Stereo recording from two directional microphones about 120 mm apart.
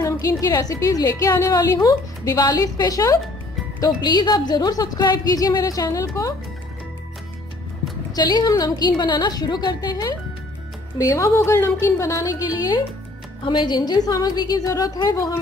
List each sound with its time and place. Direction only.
0.0 s a woman's voice: 30° left (ahead or behind)
8.1 s a woman's voice: 35° left (ahead or behind)
13.4 s a woman's voice: 40° left (ahead or behind)